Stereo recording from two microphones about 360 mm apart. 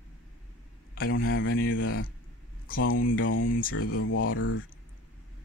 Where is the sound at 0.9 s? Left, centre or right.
Left.